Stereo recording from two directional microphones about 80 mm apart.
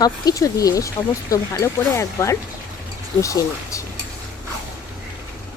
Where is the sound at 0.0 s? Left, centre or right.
Left.